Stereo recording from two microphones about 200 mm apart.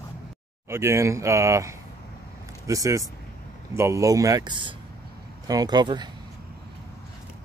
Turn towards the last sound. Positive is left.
turn(degrees=-20)  # may be behind; listen again after turning